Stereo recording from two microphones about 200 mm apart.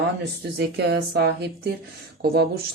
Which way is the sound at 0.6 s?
55° right (ahead or behind).